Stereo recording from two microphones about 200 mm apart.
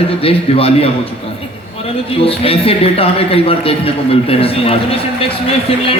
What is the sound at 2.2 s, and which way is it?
A man's voice, 30° left (ahead or behind).